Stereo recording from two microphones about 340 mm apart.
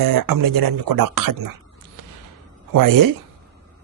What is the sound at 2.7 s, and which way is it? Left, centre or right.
Speech, right.